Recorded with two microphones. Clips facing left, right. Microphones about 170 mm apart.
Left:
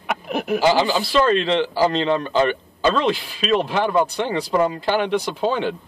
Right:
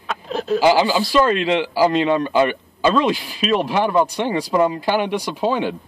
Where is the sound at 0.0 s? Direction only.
15° left (ahead or behind).